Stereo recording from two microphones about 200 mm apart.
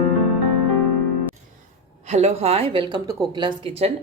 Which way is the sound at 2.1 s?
35° right (ahead or behind).